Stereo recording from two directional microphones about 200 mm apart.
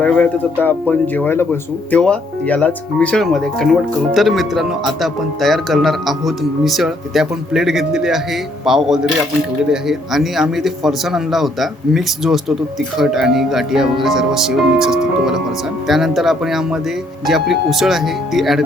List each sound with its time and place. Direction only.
0.0 s speech: 5° left (ahead or behind)